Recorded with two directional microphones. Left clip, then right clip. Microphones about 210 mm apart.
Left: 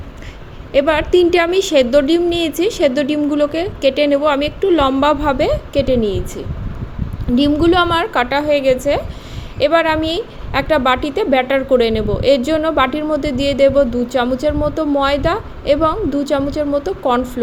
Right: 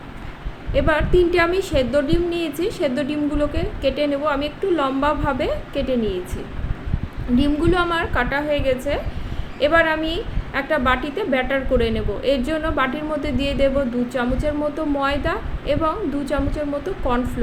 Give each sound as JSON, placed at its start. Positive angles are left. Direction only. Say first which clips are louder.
{"t": 0.7, "sound": "a woman's voice", "louder": "left 6 dB", "side_deg": 40}